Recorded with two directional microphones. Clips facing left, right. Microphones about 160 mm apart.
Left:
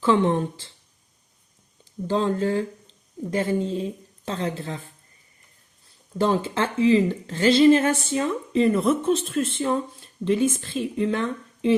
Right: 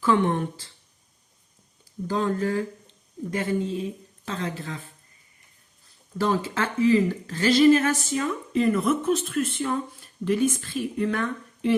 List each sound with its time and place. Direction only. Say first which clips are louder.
0.0 s speech: left 2 dB; 25° left (ahead or behind)
2.0 s speech: left 2 dB; 30° left (ahead or behind)
6.1 s speech: left 2 dB; 30° left (ahead or behind)